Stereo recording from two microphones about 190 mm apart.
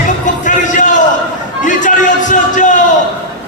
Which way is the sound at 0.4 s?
40° left (ahead or behind).